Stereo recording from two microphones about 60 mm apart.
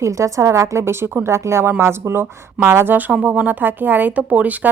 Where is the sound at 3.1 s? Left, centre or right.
Right.